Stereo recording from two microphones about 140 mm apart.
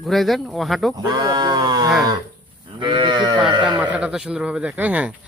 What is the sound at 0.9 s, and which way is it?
Speech, 30° right (ahead or behind).